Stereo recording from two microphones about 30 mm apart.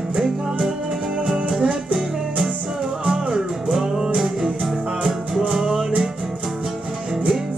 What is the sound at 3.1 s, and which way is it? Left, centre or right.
Music, centre.